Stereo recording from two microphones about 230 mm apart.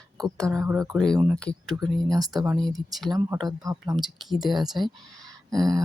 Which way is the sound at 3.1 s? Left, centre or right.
Centre.